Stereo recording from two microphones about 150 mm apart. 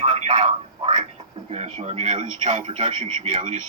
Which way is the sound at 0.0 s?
45° right (ahead or behind).